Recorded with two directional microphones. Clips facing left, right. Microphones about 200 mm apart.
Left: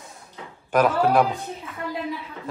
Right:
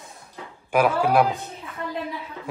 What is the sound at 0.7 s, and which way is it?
Speech, 10° right (ahead or behind).